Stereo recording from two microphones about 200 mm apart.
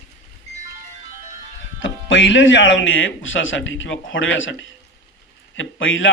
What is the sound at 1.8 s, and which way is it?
Speech, 70° left (ahead or behind).